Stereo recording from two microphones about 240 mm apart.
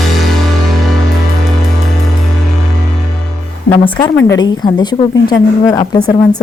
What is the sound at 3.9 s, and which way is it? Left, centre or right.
A woman's voice, centre.